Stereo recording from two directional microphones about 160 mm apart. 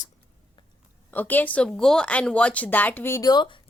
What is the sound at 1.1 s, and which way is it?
A woman's voice, 10° left (ahead or behind).